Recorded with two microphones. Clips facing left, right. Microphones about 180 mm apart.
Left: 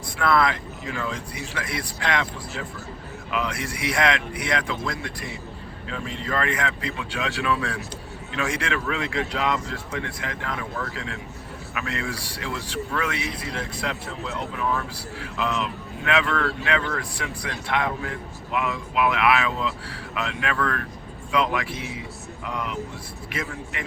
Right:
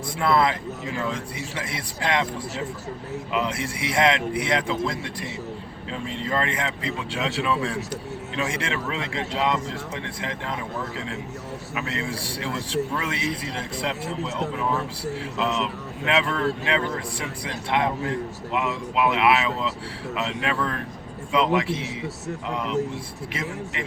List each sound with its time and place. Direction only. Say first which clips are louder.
0.2 s speech: even; 25° right (ahead or behind)